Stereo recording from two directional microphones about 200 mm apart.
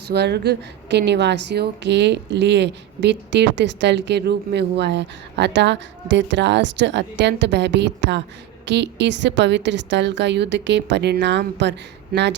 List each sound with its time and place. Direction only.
0.1 s a woman's voice: 55° right (ahead or behind)